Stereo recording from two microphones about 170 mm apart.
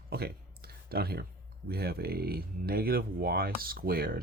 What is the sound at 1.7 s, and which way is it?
Speech, 65° right (ahead or behind).